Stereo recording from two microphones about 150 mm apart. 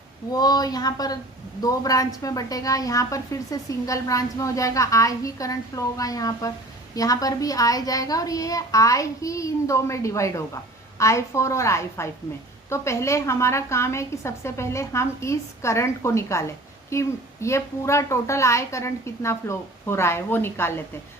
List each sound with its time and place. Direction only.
0.3 s a child's voice: 25° left (ahead or behind)